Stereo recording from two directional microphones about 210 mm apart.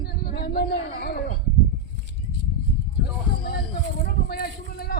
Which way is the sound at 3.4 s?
45° left (ahead or behind).